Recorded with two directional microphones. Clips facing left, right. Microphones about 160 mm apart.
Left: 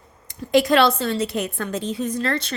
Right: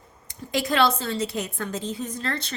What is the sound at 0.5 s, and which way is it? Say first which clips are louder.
A woman's voice: left 6 dB; 70° left (ahead or behind).